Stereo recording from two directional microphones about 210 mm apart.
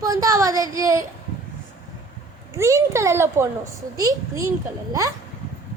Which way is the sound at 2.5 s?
15° right (ahead or behind).